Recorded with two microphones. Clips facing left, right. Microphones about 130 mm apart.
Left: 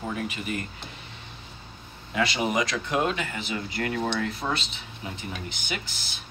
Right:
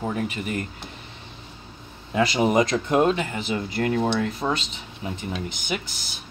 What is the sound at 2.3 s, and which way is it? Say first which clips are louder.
Speech: right 6 dB; 35° right (ahead or behind).